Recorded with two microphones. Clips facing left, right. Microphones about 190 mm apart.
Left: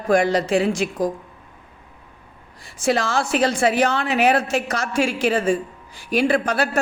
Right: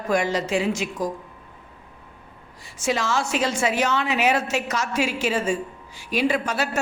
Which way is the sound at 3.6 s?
60° left (ahead or behind).